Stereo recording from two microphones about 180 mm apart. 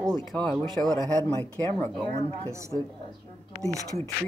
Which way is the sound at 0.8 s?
20° right (ahead or behind).